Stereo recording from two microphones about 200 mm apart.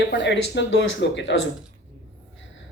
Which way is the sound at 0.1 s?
60° left (ahead or behind).